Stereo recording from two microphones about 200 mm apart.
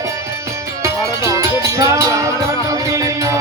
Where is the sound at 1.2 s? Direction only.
15° right (ahead or behind).